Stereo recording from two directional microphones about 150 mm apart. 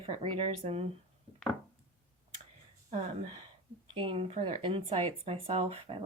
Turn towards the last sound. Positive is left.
turn(degrees=-40)  # may be behind; listen again after turning